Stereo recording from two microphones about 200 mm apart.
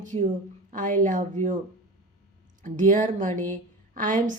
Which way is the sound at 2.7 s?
40° right (ahead or behind).